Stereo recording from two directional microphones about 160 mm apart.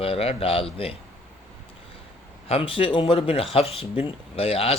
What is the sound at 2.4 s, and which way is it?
Speech, 35° left (ahead or behind).